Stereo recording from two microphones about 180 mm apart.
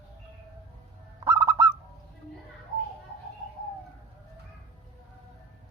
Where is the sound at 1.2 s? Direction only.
20° right (ahead or behind).